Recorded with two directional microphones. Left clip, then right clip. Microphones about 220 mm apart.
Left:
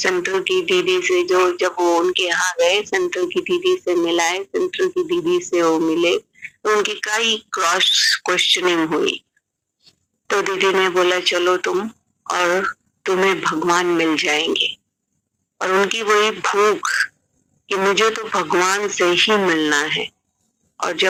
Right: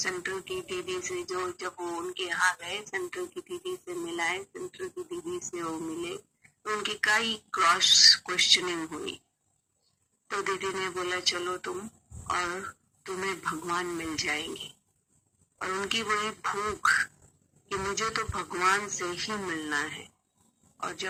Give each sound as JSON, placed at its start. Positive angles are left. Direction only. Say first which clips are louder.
{"t": 0.0, "sound": "speech", "louder": "left 14 dB", "side_deg": 45}
{"t": 10.2, "sound": "speech", "louder": "left 13 dB", "side_deg": 40}